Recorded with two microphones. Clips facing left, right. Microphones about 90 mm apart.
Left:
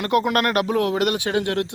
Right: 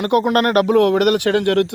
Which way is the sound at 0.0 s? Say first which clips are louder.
Right 4 dB; 40° right (ahead or behind).